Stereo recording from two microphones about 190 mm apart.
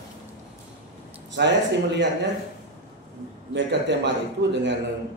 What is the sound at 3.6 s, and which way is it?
Speech, 70° right (ahead or behind).